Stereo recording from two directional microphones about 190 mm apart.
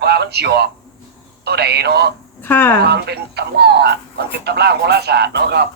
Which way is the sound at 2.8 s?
60° right (ahead or behind).